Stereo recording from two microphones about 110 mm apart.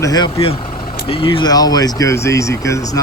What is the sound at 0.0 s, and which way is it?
Speech, 35° left (ahead or behind).